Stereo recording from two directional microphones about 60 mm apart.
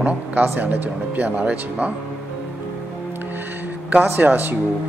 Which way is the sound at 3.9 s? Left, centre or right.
Right.